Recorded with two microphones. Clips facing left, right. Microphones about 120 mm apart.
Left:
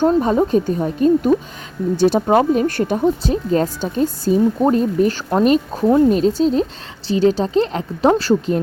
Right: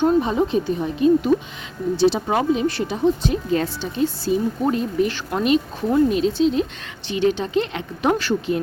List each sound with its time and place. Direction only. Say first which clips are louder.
0.0 s speech: left 3 dB; 40° left (ahead or behind)